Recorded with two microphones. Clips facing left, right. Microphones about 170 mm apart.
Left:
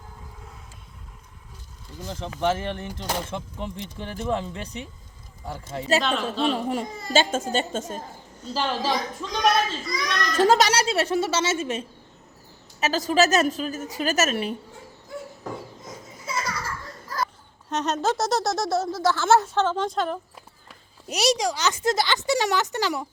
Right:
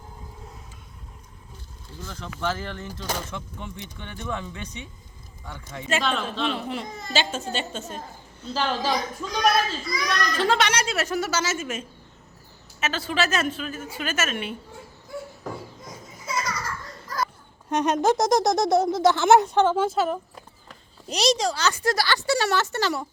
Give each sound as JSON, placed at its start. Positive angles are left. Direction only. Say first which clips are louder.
{"t": 2.0, "sound": "a woman's voice", "louder": "left 4 dB", "side_deg": 20}
{"t": 6.0, "sound": "a child's voice", "louder": "left 1 dB", "side_deg": 0}
{"t": 6.4, "sound": "a woman's voice", "louder": "left 4 dB", "side_deg": 40}
{"t": 8.5, "sound": "a child's voice", "louder": "even", "side_deg": 0}
{"t": 10.3, "sound": "a woman's voice", "louder": "left 6 dB", "side_deg": 40}
{"t": 17.7, "sound": "speech", "louder": "right 4 dB", "side_deg": -10}
{"t": 21.1, "sound": "speech", "louder": "even", "side_deg": 10}